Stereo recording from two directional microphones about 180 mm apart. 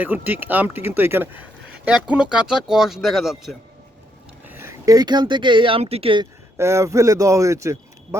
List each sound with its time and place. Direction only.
0.0 s speech: 10° right (ahead or behind)
4.4 s speech: 15° right (ahead or behind); by 6.2 s 30° right (ahead or behind)
6.6 s speech: 15° right (ahead or behind)